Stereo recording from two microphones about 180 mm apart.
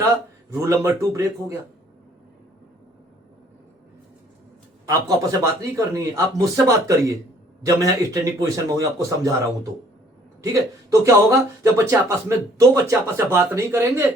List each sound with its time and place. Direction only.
0.5 s speech: 15° right (ahead or behind)
4.9 s speech: 20° right (ahead or behind)
10.4 s speech: 20° right (ahead or behind)